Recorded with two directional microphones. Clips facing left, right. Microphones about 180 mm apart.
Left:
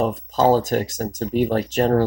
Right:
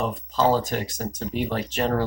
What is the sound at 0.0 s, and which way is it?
Speech, 45° left (ahead or behind).